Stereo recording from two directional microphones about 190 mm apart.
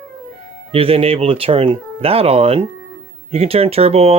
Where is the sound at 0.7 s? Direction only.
30° right (ahead or behind).